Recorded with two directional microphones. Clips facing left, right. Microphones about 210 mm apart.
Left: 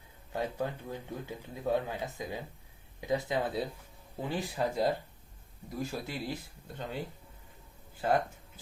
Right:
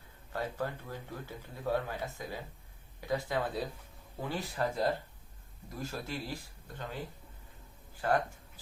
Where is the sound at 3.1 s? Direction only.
20° left (ahead or behind).